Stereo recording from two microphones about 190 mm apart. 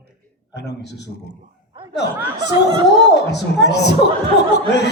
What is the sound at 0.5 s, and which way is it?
Speech, 60° left (ahead or behind).